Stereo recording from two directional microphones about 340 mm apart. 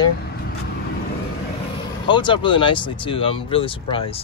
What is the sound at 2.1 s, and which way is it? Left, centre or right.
Speech, centre.